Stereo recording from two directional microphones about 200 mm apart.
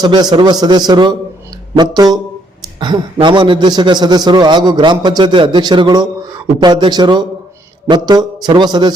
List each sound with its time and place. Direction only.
0.0 s a man's voice: 20° right (ahead or behind)